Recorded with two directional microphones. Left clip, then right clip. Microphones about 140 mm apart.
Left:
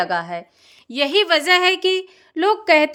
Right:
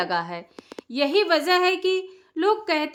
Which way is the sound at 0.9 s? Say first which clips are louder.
Left 4 dB; 45° left (ahead or behind).